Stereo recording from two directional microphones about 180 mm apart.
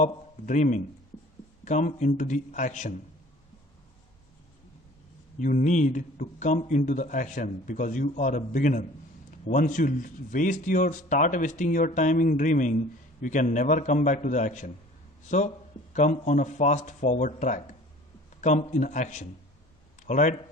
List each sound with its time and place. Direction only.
0.0 s a man's voice: 45° left (ahead or behind)
5.4 s speech: 45° left (ahead or behind)